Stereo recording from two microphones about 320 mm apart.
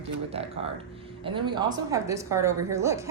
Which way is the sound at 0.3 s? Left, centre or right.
Centre.